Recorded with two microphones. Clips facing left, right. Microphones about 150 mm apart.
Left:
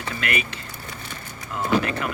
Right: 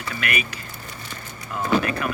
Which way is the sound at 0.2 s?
25° left (ahead or behind).